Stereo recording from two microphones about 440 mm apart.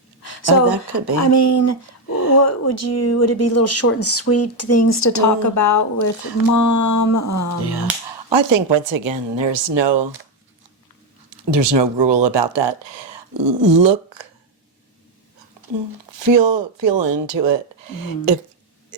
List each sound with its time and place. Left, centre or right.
0.7 s speech: right
1.2 s speech: left
2.1 s a sound: right
2.4 s speech: left
7.6 s speech: right
8.3 s speech: right
11.3 s speech: right
16.1 s speech: right